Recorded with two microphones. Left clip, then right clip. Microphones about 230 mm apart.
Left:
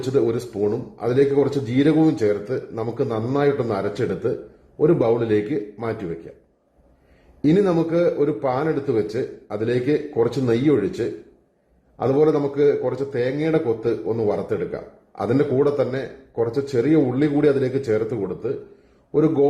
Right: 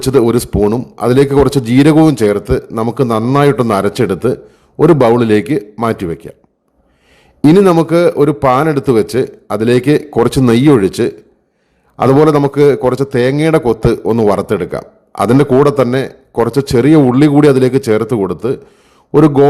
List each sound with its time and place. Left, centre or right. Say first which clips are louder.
0.0 s a man's voice: right 10 dB; right
7.4 s a man's voice: right 11 dB; right